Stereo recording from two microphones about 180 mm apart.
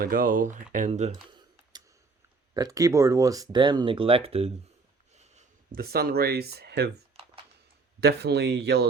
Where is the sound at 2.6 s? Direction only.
20° right (ahead or behind).